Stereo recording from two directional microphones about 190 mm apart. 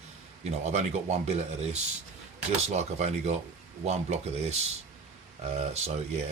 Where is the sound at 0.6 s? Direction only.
35° right (ahead or behind).